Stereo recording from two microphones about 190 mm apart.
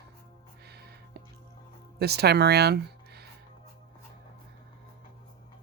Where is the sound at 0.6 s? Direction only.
60° right (ahead or behind).